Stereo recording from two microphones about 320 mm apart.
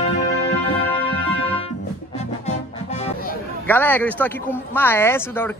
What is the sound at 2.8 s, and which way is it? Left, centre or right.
Music, centre.